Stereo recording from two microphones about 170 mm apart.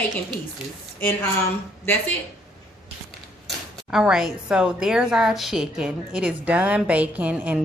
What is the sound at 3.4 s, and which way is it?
Speech, 5° right (ahead or behind).